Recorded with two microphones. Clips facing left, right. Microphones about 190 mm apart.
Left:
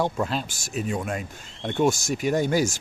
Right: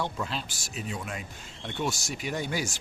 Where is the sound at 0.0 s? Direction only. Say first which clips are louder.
Left 7 dB; 45° left (ahead or behind).